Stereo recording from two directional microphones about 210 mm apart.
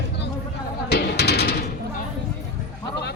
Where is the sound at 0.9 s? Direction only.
50° left (ahead or behind).